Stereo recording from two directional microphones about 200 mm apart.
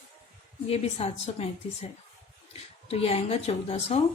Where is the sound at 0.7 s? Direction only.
30° left (ahead or behind).